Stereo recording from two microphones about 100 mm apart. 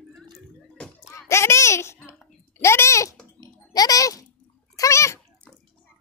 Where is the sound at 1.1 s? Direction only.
30° left (ahead or behind).